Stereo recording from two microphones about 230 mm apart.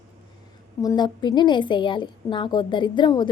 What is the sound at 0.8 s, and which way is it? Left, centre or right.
A woman's voice, centre.